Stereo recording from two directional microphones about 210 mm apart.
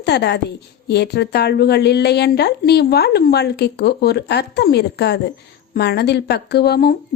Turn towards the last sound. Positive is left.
turn(degrees=50)  # may be behind; listen again after turning